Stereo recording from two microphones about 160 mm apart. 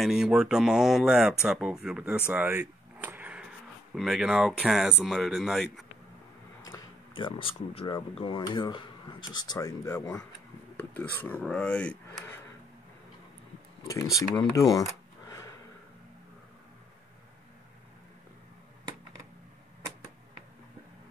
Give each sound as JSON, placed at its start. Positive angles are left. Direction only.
{"t": 0.0, "sound": "speech", "side_deg": -5}
{"t": 6.6, "sound": "speech", "side_deg": 20}
{"t": 14.3, "sound": "a sound", "side_deg": 20}